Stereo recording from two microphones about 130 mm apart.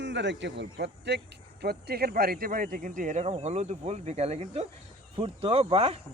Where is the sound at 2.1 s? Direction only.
90° right.